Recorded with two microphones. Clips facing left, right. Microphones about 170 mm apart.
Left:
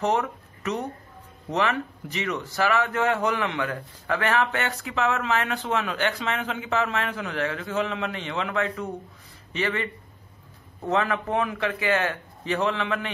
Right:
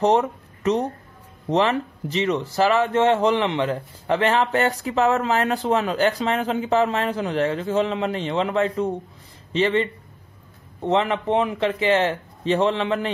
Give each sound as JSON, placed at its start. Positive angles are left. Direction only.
{"t": 0.0, "sound": "a man's voice", "side_deg": -30}